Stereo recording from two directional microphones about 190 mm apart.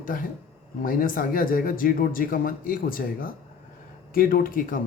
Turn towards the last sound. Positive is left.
turn(degrees=45)  # may be behind; listen again after turning